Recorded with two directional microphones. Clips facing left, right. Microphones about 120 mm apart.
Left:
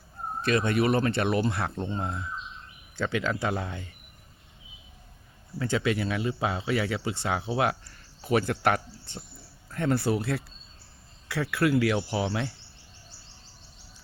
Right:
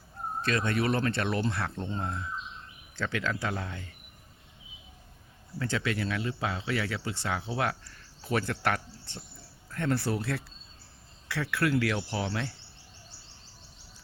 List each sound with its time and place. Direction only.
0.4 s speech: 10° left (ahead or behind)
5.5 s speech: 15° left (ahead or behind)